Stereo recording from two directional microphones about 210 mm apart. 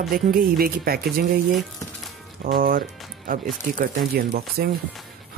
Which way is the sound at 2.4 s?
40° right (ahead or behind).